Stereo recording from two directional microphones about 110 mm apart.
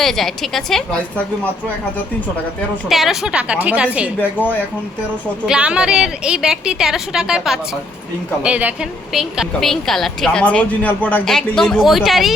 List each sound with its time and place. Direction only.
0.0 s a woman's voice: centre (ahead or behind)
2.9 s a woman's voice: centre (ahead or behind)
4.2 s a man's voice: 15° left (ahead or behind)
5.5 s a woman's voice: 10° right (ahead or behind)
9.1 s a woman's voice: centre (ahead or behind); by 11.2 s 15° left (ahead or behind)
11.3 s a woman's voice: 5° left (ahead or behind)